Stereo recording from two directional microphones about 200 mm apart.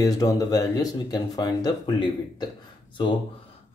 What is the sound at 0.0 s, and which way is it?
Speech, 20° left (ahead or behind).